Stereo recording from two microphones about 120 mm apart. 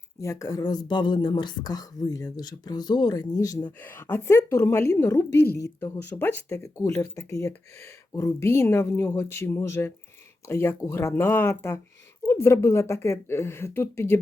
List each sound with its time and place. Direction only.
0.2 s speech: 25° left (ahead or behind)
3.7 s a woman's voice: 15° left (ahead or behind)